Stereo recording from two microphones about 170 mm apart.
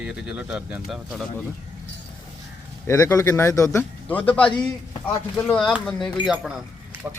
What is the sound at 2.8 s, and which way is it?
Speech, 20° left (ahead or behind).